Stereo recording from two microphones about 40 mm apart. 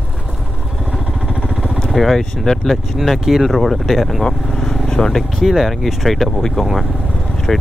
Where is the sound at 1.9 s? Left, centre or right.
Centre.